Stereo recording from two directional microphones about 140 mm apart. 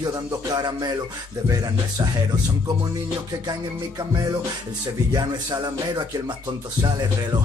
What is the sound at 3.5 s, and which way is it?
Music, 25° right (ahead or behind).